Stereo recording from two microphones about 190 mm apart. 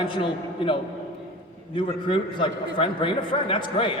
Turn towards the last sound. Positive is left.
turn(degrees=25)  # may be behind; listen again after turning